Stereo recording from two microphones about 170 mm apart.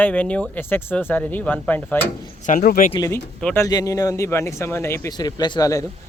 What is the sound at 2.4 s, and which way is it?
Speech, 50° left (ahead or behind).